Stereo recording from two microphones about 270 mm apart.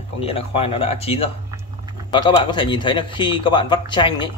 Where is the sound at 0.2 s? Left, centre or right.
Left.